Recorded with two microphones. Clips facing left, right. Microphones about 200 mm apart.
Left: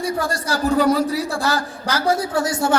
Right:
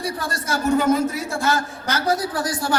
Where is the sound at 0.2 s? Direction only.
30° left (ahead or behind).